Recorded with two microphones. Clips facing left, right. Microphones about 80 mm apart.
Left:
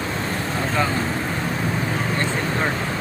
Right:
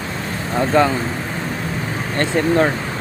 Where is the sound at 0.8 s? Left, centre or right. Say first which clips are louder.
Right 8 dB; right.